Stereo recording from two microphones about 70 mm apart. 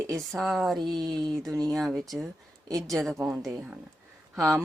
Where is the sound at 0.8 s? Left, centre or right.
Right.